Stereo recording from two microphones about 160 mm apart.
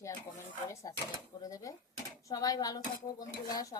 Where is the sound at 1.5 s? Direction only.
20° left (ahead or behind).